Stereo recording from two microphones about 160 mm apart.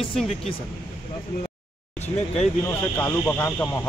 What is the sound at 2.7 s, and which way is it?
Speech, 10° left (ahead or behind).